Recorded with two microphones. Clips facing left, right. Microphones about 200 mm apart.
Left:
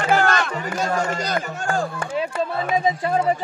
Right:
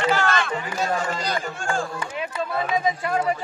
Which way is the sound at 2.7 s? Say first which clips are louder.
Left 4 dB; 30° left (ahead or behind).